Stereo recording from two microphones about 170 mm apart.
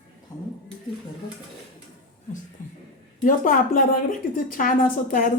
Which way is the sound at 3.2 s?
55° left (ahead or behind).